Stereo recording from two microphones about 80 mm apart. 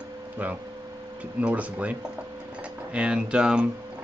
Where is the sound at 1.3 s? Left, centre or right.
Centre.